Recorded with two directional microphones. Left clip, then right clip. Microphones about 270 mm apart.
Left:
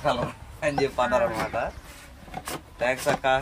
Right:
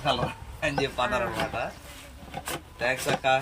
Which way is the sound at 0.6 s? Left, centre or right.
Centre.